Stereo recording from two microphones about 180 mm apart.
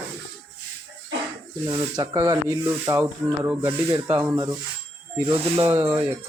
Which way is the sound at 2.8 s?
10° right (ahead or behind).